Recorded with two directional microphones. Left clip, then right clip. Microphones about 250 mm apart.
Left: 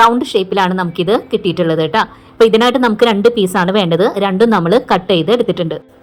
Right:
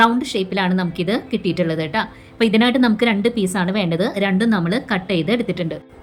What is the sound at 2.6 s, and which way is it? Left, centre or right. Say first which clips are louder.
Speech: left 6 dB; left.